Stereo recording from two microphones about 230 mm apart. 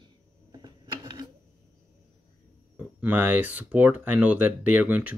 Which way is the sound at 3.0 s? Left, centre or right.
Centre.